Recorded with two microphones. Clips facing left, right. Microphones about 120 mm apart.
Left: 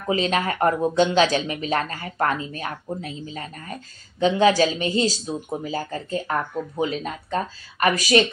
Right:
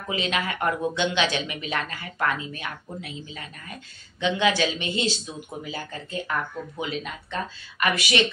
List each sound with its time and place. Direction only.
0.1 s speech: 40° left (ahead or behind)